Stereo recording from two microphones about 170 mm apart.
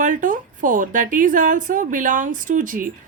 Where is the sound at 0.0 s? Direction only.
50° right (ahead or behind).